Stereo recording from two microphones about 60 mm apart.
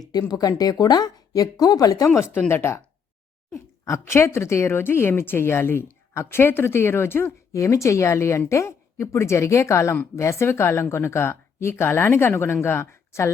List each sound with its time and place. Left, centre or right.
0.0 s speech: left
2.5 s a woman's voice: left